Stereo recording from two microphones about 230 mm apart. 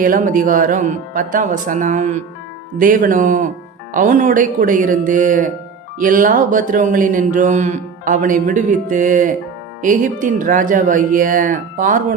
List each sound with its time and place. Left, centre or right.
0.0 s speech: right